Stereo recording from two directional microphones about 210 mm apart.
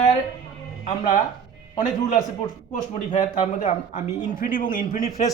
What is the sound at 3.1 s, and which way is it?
Speech, 30° left (ahead or behind).